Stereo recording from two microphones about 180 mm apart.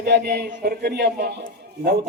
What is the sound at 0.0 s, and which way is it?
A man's voice, 65° right (ahead or behind).